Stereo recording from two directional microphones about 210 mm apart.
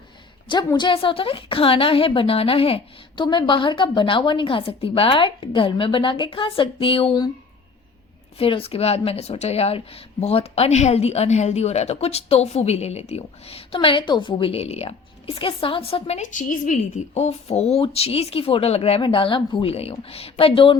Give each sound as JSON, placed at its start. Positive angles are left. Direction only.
{"t": 0.4, "sound": "a woman's voice", "side_deg": 20}
{"t": 8.4, "sound": "a woman's voice", "side_deg": 25}